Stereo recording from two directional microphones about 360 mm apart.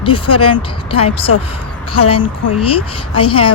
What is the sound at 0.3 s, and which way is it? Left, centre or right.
Speech, left.